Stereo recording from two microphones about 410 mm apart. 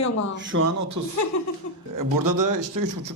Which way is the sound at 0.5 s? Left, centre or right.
Right.